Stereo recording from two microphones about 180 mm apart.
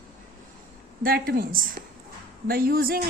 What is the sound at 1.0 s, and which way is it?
Speech, 55° right (ahead or behind).